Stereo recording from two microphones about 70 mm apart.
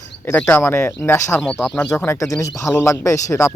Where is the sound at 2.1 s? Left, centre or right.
Left.